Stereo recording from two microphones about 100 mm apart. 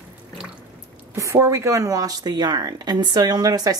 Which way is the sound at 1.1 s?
30° right (ahead or behind).